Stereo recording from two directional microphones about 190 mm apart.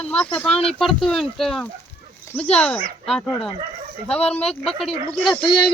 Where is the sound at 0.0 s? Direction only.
5° left (ahead or behind).